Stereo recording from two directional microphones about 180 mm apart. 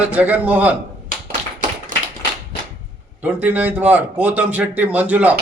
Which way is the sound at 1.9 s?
45° right (ahead or behind).